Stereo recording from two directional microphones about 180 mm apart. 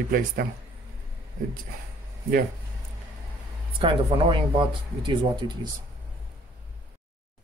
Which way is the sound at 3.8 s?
30° right (ahead or behind).